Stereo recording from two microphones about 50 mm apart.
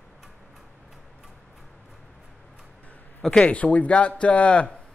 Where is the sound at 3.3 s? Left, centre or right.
Left.